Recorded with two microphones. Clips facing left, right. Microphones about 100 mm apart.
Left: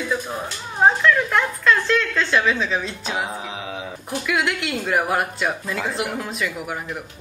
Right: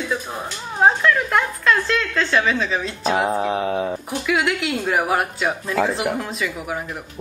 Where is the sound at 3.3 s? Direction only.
50° right (ahead or behind).